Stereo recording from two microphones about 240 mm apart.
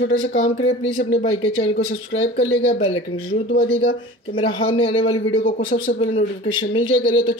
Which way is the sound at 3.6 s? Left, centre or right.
Left.